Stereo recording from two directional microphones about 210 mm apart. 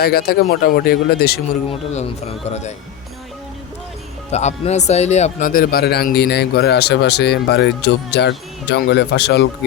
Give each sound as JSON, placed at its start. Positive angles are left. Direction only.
{"t": 0.0, "sound": "speech", "side_deg": 45}
{"t": 1.7, "sound": "speech", "side_deg": 30}
{"t": 4.3, "sound": "speech", "side_deg": 30}